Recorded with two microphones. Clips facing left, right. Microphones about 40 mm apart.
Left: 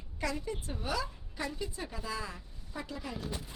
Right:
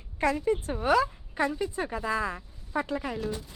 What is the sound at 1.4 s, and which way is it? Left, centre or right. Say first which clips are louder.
Speech: right 10 dB; right.